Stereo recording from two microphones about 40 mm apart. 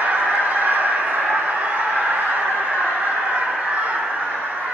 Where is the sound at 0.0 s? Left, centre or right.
Right.